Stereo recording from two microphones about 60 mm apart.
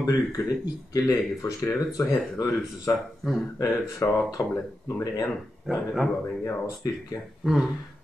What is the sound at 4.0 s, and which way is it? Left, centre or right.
Speech, left.